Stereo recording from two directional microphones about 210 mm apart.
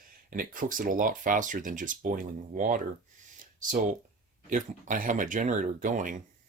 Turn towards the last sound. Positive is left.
turn(degrees=-35)  # may be behind; listen again after turning